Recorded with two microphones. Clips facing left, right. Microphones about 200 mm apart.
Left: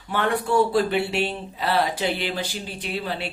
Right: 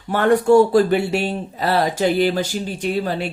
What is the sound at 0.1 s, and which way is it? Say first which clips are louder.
Speech: right 9 dB; 45° right (ahead or behind).